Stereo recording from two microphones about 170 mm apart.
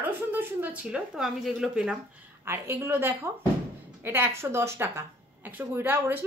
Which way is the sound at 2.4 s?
15° right (ahead or behind).